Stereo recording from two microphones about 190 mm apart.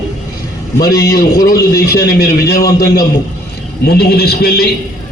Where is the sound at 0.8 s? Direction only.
20° left (ahead or behind).